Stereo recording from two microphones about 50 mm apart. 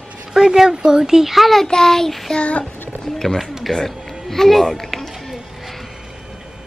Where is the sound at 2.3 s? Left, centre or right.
Left.